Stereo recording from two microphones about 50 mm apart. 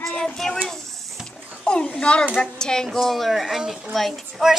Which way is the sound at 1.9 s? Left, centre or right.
Left.